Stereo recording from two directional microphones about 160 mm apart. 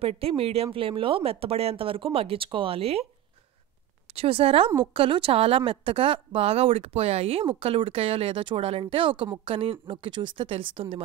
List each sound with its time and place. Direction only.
0.0 s speech: 40° right (ahead or behind)
4.1 s speech: 35° right (ahead or behind)